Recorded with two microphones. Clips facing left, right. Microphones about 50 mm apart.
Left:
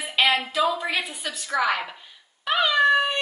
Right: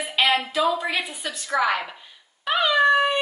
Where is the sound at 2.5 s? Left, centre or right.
Centre.